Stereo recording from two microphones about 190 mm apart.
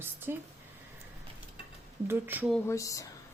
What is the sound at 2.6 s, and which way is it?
Speech, 15° left (ahead or behind).